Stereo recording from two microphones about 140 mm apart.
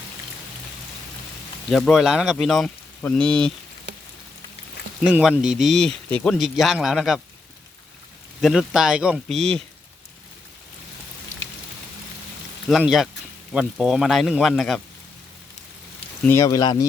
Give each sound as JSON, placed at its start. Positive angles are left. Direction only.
{"t": 1.7, "sound": "speech", "side_deg": 0}
{"t": 5.0, "sound": "speech", "side_deg": -10}
{"t": 8.4, "sound": "speech", "side_deg": 0}
{"t": 12.6, "sound": "speech", "side_deg": 0}
{"t": 16.2, "sound": "speech", "side_deg": 20}